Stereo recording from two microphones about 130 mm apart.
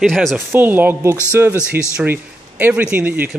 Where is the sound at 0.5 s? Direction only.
15° right (ahead or behind).